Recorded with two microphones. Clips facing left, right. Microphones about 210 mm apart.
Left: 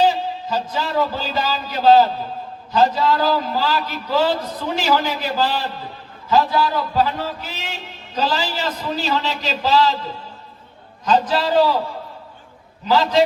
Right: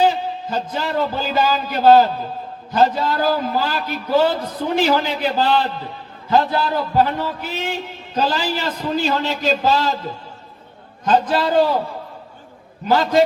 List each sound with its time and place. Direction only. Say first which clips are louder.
0.1 s a man's voice: even; 55° right (ahead or behind)
11.0 s a man's voice: right 1 dB; 55° right (ahead or behind)
12.8 s a man's voice: right 1 dB; 50° right (ahead or behind)